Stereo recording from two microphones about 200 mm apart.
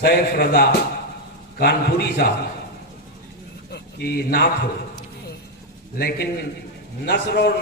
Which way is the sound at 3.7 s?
55° left (ahead or behind).